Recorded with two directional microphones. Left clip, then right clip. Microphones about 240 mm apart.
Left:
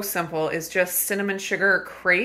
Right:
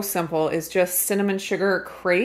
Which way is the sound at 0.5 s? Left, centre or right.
Right.